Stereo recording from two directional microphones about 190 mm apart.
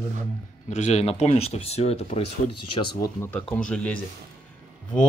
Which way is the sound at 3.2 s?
10° left (ahead or behind).